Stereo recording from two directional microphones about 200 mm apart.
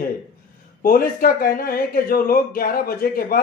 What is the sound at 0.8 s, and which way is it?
A man's voice, 45° left (ahead or behind).